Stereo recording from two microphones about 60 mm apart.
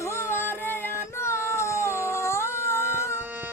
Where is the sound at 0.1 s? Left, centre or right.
Left.